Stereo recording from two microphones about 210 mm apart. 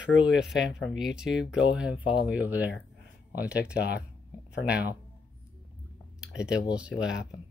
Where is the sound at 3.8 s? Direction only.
50° left (ahead or behind).